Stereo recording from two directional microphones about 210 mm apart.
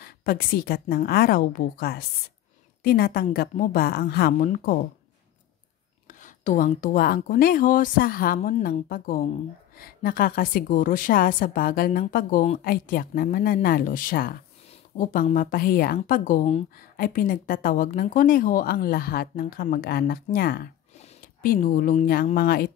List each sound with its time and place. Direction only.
0.0 s a woman's voice: 45° left (ahead or behind)
6.0 s a woman's voice: 35° left (ahead or behind)